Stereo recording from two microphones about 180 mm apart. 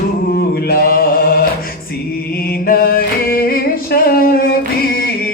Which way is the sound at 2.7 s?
55° left (ahead or behind).